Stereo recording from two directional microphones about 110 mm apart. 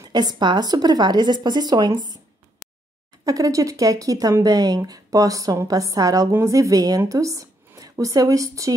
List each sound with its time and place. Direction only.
0.0 s speech: 40° right (ahead or behind)
3.3 s speech: 30° right (ahead or behind)